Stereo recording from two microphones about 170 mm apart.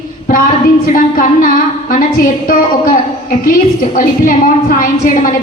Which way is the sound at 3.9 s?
55° left (ahead or behind).